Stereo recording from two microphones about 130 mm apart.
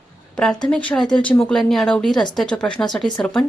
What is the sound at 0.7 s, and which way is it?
A woman's voice, 10° left (ahead or behind).